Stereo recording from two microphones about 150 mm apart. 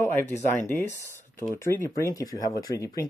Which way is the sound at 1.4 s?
15° left (ahead or behind).